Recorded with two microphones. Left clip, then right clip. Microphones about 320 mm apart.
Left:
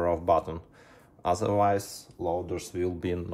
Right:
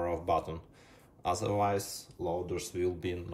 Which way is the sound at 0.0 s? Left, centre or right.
Centre.